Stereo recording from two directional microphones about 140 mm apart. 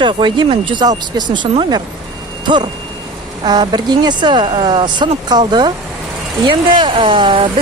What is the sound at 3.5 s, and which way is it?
Speech, 30° right (ahead or behind).